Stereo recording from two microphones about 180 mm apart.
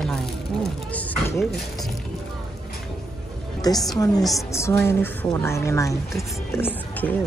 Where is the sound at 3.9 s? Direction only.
20° left (ahead or behind).